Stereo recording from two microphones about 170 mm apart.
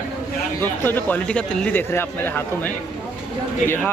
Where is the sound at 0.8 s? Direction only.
10° left (ahead or behind).